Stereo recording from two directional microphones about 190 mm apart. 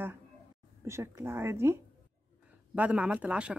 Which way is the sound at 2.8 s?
5° right (ahead or behind).